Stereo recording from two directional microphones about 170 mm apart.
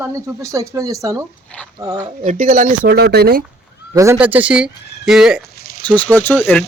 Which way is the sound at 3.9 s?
15° right (ahead or behind).